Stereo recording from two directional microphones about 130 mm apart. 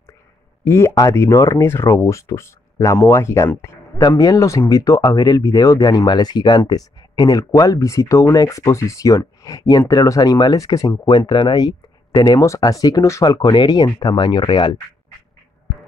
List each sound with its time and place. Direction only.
0.7 s speech: 20° left (ahead or behind); by 14.8 s 35° left (ahead or behind)